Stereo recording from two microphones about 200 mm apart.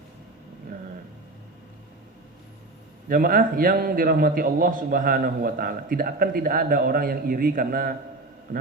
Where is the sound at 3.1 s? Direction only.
45° right (ahead or behind).